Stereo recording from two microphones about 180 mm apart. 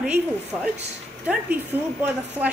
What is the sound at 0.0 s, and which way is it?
A woman's voice, 5° right (ahead or behind).